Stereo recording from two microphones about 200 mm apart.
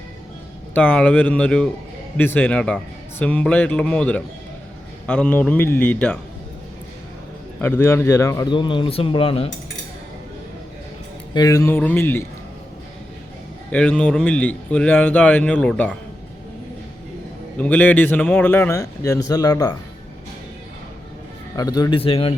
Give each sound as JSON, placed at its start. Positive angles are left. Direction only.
{"t": 0.7, "sound": "a man's voice", "side_deg": 10}
{"t": 7.6, "sound": "a man's voice", "side_deg": 10}
{"t": 11.3, "sound": "a man's voice", "side_deg": 15}
{"t": 13.7, "sound": "speech", "side_deg": 5}
{"t": 17.6, "sound": "a man's voice", "side_deg": 10}
{"t": 21.5, "sound": "a man's voice", "side_deg": 20}